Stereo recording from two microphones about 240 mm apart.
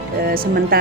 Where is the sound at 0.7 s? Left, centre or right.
Right.